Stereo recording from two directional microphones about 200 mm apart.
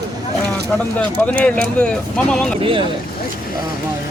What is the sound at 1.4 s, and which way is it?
Speech, 5° left (ahead or behind).